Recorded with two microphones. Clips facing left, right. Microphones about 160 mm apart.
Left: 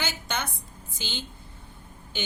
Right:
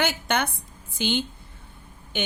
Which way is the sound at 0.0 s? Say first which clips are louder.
Right 7 dB; 60° right (ahead or behind).